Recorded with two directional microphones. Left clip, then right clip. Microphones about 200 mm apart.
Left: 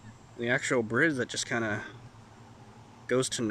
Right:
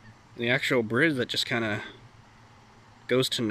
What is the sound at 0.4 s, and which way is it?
Speech, centre (ahead or behind).